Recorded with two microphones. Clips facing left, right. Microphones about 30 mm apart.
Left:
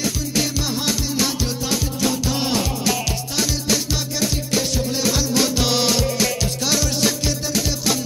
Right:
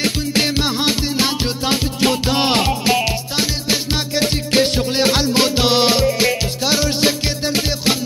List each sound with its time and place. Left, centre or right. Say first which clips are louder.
0.0 s music: right 4 dB; right